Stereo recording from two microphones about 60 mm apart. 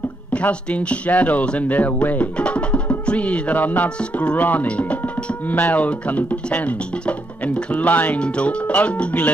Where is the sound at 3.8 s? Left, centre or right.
Centre.